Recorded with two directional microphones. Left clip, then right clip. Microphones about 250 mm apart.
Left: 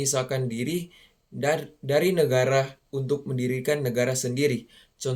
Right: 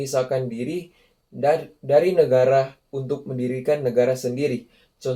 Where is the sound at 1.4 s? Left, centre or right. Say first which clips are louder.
Right 5 dB; left.